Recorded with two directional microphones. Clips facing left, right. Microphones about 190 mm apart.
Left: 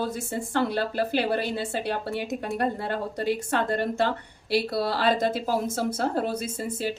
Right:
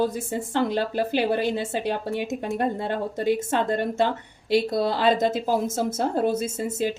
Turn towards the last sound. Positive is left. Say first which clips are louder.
# right 4 dB
turn(degrees=-20)  # may be behind; listen again after turning